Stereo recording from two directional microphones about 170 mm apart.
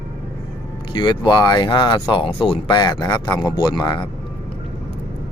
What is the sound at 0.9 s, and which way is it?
Speech, 25° left (ahead or behind).